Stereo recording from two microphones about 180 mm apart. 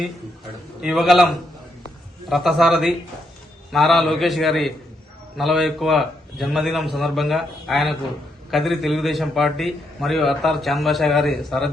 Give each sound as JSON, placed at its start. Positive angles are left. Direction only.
{"t": 0.8, "sound": "a man's voice", "side_deg": 0}
{"t": 2.3, "sound": "a man's voice", "side_deg": 0}